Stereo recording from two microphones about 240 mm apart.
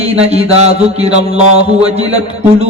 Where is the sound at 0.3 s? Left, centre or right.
Right.